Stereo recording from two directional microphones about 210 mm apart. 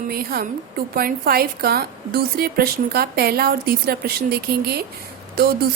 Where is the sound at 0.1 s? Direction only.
45° right (ahead or behind).